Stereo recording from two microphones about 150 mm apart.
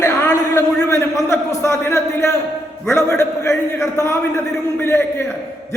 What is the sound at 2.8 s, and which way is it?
A man's voice, 20° left (ahead or behind).